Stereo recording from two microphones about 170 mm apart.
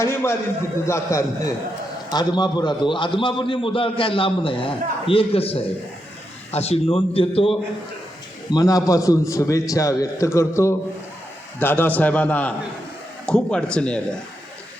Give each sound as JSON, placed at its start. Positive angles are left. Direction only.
{"t": 0.0, "sound": "a man's voice", "side_deg": 15}
{"t": 8.4, "sound": "a man's voice", "side_deg": 20}